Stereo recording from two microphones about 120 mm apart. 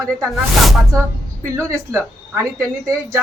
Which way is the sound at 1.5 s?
25° right (ahead or behind).